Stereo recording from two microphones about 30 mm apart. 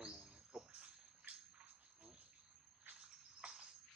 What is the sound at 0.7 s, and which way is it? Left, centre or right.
Cricket, right.